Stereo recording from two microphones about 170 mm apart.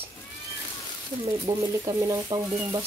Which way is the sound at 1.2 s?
35° right (ahead or behind).